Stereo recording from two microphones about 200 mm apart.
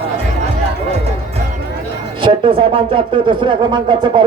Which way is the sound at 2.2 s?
25° right (ahead or behind).